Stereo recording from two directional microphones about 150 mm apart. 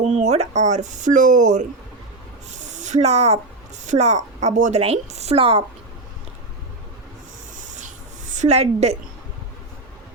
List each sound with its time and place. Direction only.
0.0 s a woman's voice: 50° right (ahead or behind)
2.5 s a sound: 55° right (ahead or behind)
3.8 s a woman's voice: 50° right (ahead or behind)
7.5 s rub: 55° right (ahead or behind)
8.3 s a woman's voice: 50° right (ahead or behind)